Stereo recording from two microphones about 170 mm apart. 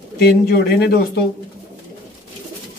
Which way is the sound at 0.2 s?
65° left (ahead or behind).